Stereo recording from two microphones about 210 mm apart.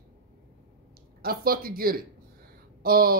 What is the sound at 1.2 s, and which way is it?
Speech, 45° right (ahead or behind).